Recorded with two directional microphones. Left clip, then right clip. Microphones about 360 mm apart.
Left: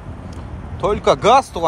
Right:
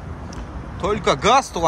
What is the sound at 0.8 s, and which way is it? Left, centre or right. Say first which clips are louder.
Speech: left 4 dB; centre.